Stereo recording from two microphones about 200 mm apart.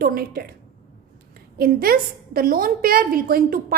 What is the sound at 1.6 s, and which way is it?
A woman's voice, 50° right (ahead or behind).